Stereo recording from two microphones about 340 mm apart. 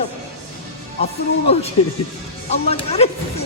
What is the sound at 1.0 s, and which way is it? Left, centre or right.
Speech, centre.